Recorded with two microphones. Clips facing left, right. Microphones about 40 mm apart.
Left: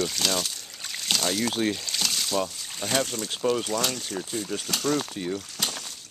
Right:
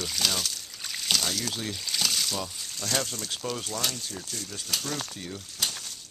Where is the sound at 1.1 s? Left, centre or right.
Centre.